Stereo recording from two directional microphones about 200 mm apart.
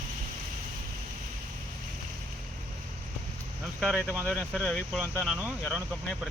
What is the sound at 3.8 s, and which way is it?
Speech, 5° right (ahead or behind).